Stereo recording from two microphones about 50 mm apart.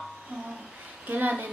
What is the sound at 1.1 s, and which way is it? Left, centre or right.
Speech, right.